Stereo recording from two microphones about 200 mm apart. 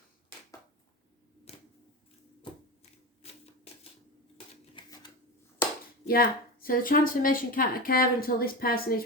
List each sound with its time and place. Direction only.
1.5 s tick-tock: 30° left (ahead or behind)
4.7 s typewriter: 25° left (ahead or behind)
6.1 s a woman's voice: 50° left (ahead or behind)